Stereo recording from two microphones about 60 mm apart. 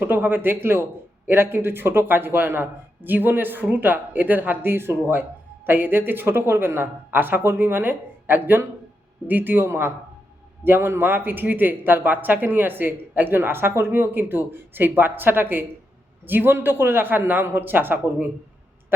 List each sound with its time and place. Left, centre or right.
0.0 s speech: right